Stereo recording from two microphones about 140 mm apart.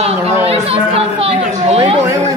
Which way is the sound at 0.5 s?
45° right (ahead or behind).